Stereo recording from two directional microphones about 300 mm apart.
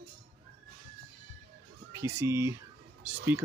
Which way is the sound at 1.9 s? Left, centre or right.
Centre.